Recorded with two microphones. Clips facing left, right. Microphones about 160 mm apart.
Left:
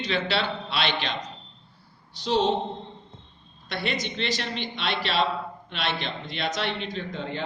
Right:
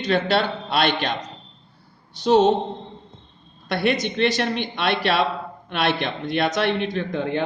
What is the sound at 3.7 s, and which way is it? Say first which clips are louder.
A man's voice: right 8 dB; 55° right (ahead or behind).